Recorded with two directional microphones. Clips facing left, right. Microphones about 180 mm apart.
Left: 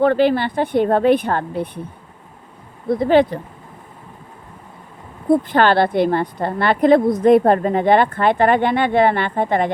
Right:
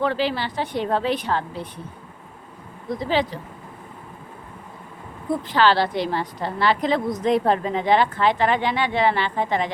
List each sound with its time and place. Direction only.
0.0 s a woman's voice: 55° left (ahead or behind)
2.9 s a woman's voice: 60° left (ahead or behind)
5.3 s a woman's voice: 55° left (ahead or behind)